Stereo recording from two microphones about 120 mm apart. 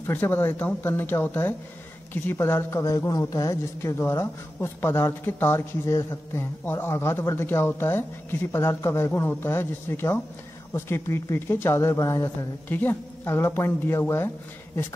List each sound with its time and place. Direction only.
0.0 s speech: 20° left (ahead or behind)